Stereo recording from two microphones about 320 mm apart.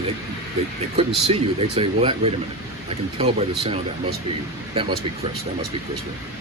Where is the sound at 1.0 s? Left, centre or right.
Centre.